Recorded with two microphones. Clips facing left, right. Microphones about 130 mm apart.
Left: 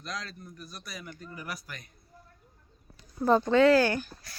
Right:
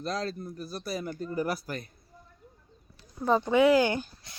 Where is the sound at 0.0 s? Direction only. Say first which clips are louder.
Right 8 dB; 35° right (ahead or behind).